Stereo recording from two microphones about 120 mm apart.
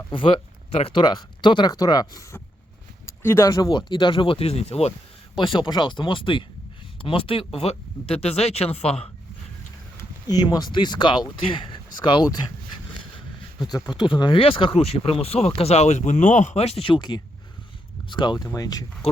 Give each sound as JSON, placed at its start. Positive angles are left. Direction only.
{"t": 0.1, "sound": "speech", "side_deg": 45}
{"t": 3.2, "sound": "speech", "side_deg": 25}
{"t": 5.4, "sound": "speech", "side_deg": 45}
{"t": 10.2, "sound": "speech", "side_deg": 35}
{"t": 13.6, "sound": "speech", "side_deg": 35}